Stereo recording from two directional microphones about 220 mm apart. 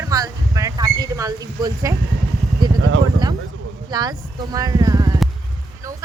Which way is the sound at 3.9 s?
20° right (ahead or behind).